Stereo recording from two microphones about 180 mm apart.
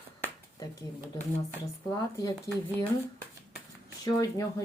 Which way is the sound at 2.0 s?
20° left (ahead or behind).